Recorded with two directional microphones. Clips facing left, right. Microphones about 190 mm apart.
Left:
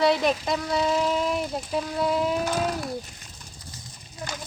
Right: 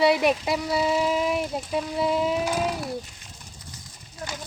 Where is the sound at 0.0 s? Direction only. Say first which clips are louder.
Right 1 dB; 10° right (ahead or behind).